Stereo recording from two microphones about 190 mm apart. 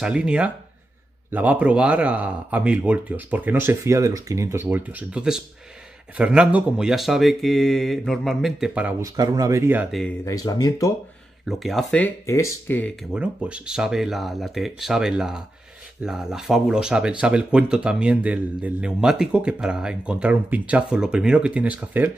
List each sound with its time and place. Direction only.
0.0 s a man's voice: 5° right (ahead or behind)
9.0 s speech: 20° right (ahead or behind); by 10.1 s centre (ahead or behind)
10.2 s speech: 20° left (ahead or behind)
11.4 s speech: centre (ahead or behind)
13.1 s a man's voice: 5° right (ahead or behind)